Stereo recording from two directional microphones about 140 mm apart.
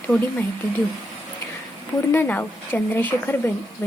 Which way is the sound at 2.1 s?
15° left (ahead or behind).